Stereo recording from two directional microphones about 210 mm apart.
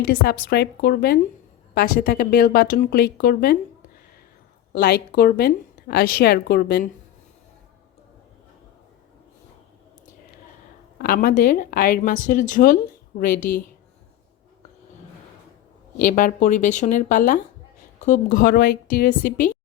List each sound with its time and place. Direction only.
0.0 s speech: 50° left (ahead or behind)
4.7 s speech: 50° left (ahead or behind)
10.9 s speech: 45° left (ahead or behind)
16.0 s a woman's voice: 40° left (ahead or behind)